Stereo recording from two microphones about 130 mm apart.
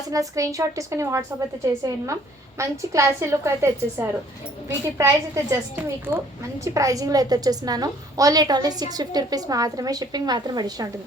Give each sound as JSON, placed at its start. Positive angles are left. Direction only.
{"t": 0.1, "sound": "a woman's voice", "side_deg": -25}